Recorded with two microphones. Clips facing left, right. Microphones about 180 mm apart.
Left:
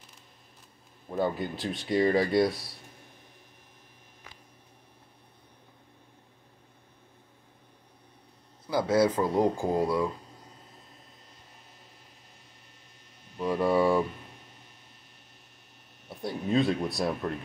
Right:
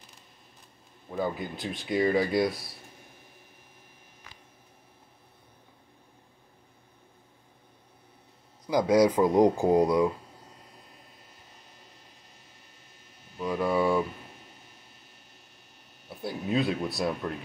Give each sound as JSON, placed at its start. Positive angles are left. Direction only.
{"t": 1.1, "sound": "speech", "side_deg": 0}
{"t": 8.6, "sound": "speech", "side_deg": -15}
{"t": 13.4, "sound": "speech", "side_deg": 0}
{"t": 16.1, "sound": "speech", "side_deg": 0}